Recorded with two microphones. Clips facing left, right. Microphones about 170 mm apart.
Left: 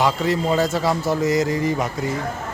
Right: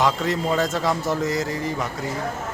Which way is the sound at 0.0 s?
Centre (ahead or behind).